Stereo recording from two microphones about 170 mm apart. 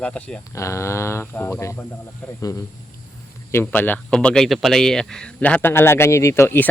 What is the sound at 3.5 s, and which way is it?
Speech, 10° left (ahead or behind).